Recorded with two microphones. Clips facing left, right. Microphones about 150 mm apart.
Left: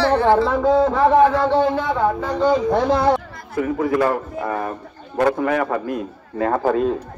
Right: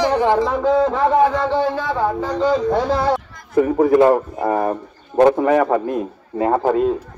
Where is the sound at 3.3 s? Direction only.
55° left (ahead or behind).